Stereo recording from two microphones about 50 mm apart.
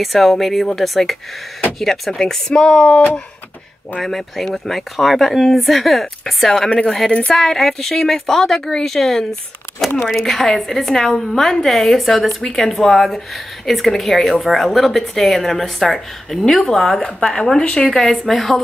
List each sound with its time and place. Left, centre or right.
0.0 s a woman's voice: centre
4.0 s speech: centre
6.7 s a woman's voice: centre
7.3 s a woman's voice: centre